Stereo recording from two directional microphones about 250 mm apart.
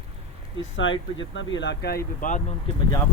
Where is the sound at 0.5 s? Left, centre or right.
Left.